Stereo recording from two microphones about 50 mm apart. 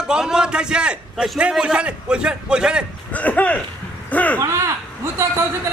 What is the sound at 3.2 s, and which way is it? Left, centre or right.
Speech, left.